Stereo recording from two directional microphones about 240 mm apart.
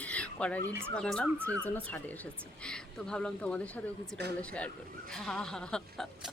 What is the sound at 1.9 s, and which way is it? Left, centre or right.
Speech, centre.